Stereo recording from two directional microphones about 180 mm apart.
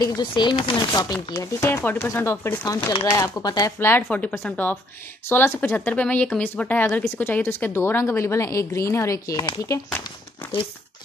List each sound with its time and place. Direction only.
0.0 s speech: 20° left (ahead or behind)